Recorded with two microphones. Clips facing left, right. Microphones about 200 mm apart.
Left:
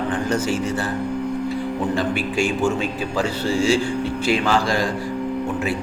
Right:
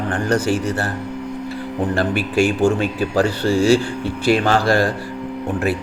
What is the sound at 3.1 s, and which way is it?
Speech, 60° right (ahead or behind).